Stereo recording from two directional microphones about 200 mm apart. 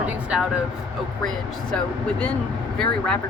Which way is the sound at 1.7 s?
5° left (ahead or behind).